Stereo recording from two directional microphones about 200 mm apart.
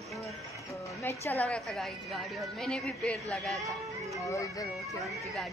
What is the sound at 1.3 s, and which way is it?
A woman's voice, 5° left (ahead or behind).